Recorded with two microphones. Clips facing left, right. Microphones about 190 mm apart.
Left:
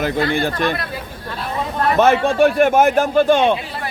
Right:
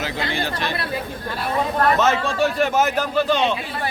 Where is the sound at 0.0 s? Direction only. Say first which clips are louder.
Left 7 dB; 55° left (ahead or behind).